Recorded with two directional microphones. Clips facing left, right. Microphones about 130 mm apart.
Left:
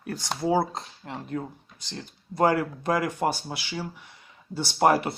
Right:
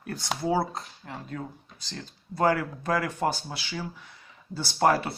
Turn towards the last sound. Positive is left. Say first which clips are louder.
# left 2 dB
turn(degrees=15)  # may be behind; listen again after turning